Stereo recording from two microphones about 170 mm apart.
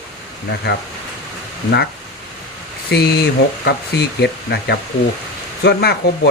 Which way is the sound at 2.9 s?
70° left (ahead or behind).